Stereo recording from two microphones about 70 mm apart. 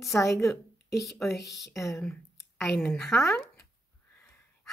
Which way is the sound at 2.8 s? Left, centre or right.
Centre.